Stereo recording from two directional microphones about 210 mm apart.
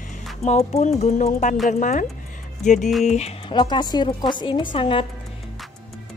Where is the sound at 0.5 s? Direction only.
35° left (ahead or behind).